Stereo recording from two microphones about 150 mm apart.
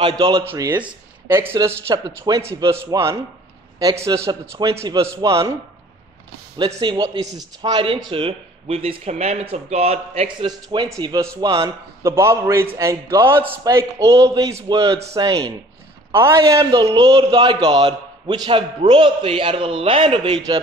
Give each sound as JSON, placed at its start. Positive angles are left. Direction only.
{"t": 0.5, "sound": "speech", "side_deg": -15}
{"t": 1.6, "sound": "a man's voice", "side_deg": -25}
{"t": 6.8, "sound": "a man's voice", "side_deg": -30}
{"t": 16.1, "sound": "a man's voice", "side_deg": -15}